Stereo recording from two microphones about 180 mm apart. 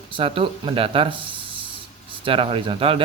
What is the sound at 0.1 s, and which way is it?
A man's voice, 30° right (ahead or behind).